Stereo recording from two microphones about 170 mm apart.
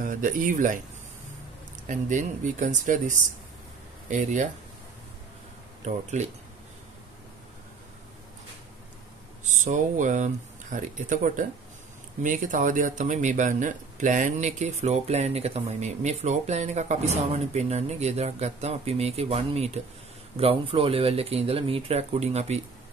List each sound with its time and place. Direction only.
0.0 s speech: 50° right (ahead or behind)
1.9 s speech: 45° right (ahead or behind)
5.9 s speech: 45° right (ahead or behind)
9.5 s speech: 45° right (ahead or behind)